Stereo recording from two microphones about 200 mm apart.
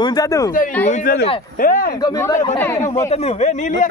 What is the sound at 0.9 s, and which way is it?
Speech, 45° left (ahead or behind).